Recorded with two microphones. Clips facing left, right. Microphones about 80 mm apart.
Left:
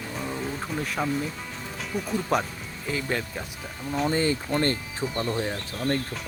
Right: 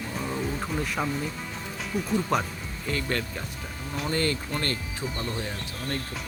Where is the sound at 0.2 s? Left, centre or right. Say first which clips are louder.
Right 1 dB; centre.